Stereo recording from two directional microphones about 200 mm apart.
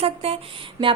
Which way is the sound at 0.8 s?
15° right (ahead or behind).